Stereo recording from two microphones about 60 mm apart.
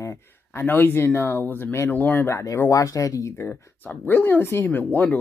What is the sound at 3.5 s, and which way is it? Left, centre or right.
Speech, left.